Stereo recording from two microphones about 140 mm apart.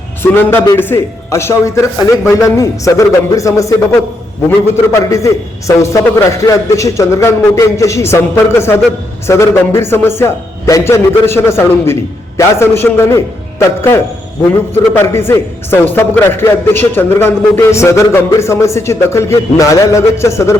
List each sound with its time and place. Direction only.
0.2 s a man's voice: 15° left (ahead or behind)